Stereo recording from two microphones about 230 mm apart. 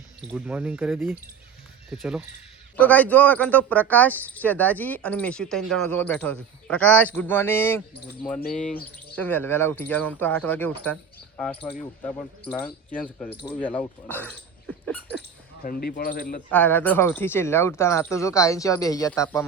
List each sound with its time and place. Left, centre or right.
0.3 s speech: centre
12.9 s speech: centre
15.6 s speech: left
16.5 s speech: centre